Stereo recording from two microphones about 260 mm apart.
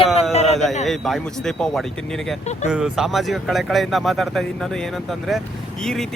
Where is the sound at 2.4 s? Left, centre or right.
Left.